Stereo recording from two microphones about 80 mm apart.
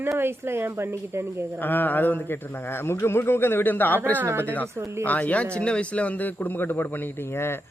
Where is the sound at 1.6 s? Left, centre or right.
Left.